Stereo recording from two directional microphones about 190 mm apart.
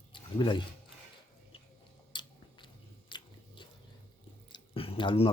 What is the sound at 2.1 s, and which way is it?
Biting, 25° left (ahead or behind).